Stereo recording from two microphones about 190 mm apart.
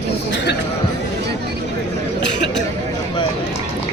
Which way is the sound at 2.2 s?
70° left (ahead or behind).